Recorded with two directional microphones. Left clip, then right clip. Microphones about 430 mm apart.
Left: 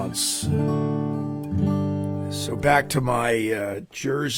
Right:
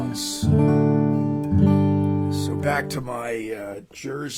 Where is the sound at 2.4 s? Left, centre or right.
Left.